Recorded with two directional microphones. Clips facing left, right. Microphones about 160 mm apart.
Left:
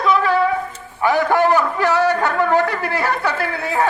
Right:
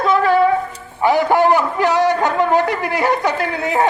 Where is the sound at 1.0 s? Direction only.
15° right (ahead or behind).